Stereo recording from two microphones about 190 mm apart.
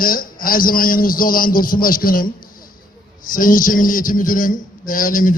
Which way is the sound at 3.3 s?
45° left (ahead or behind).